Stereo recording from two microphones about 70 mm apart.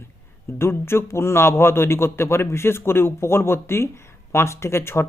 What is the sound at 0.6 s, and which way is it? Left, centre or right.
Speech, left.